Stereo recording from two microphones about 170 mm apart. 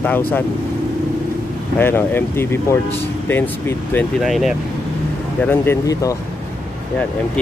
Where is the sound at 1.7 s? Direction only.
10° left (ahead or behind).